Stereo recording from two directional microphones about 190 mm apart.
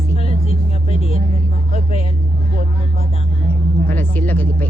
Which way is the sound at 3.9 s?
10° left (ahead or behind).